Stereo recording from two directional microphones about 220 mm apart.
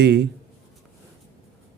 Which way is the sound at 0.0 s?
50° right (ahead or behind).